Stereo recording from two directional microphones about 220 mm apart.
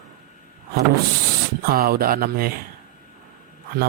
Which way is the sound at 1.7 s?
45° right (ahead or behind).